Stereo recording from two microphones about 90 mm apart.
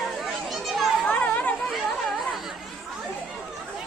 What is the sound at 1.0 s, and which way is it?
Chatter, 15° left (ahead or behind).